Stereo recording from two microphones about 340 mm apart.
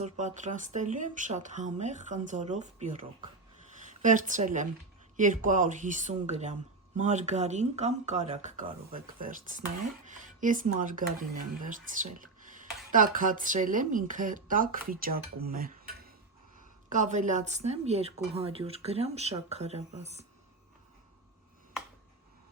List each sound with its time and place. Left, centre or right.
0.0 s speech: right